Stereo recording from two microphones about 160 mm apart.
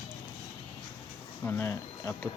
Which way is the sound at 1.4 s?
15° left (ahead or behind).